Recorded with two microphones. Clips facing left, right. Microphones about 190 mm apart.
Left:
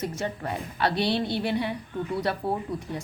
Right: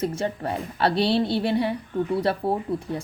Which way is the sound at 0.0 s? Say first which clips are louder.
Right 4 dB; 30° right (ahead or behind).